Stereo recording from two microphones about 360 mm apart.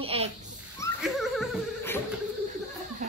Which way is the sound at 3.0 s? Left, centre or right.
Centre.